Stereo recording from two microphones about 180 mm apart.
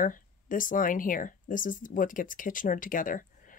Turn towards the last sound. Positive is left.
turn(degrees=50)  # may be behind; listen again after turning